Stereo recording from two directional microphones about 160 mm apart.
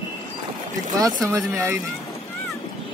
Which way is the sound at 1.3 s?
15° right (ahead or behind).